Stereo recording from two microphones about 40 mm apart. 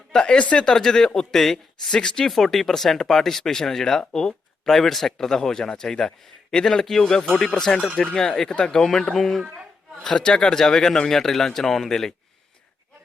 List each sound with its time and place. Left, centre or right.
0.1 s speech: centre
0.3 s speech: left
0.6 s speech: centre
1.9 s speech: left
2.3 s speech: centre
7.3 s speech: left
7.6 s speech: centre
10.0 s speech: centre